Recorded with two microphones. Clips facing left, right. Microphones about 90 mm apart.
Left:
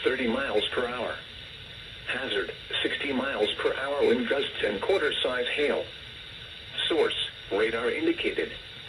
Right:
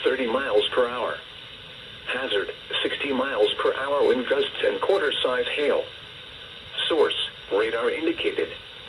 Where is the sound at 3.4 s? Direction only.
60° right (ahead or behind).